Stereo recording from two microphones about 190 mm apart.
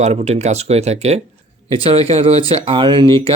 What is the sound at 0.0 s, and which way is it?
Speech, 35° right (ahead or behind).